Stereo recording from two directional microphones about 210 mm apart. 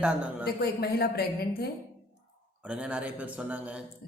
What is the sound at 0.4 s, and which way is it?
Speech, 50° left (ahead or behind).